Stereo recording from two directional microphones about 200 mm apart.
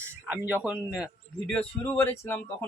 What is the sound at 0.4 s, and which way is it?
A man's voice, 10° right (ahead or behind).